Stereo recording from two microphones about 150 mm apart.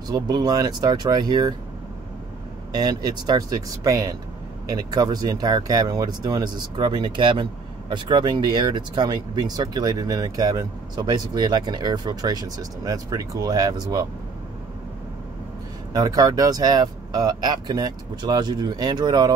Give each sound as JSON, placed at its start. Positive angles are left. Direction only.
{"t": 0.1, "sound": "speech", "side_deg": -25}
{"t": 2.7, "sound": "speech", "side_deg": -25}
{"t": 15.9, "sound": "speech", "side_deg": -25}